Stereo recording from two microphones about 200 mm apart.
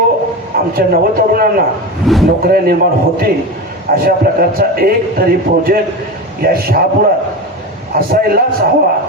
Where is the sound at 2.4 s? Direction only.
50° right (ahead or behind).